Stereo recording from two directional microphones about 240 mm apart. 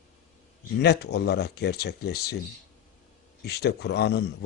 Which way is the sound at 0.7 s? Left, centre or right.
Left.